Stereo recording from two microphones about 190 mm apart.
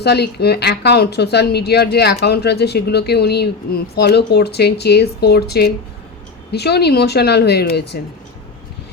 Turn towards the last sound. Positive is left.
turn(degrees=60)  # may be behind; listen again after turning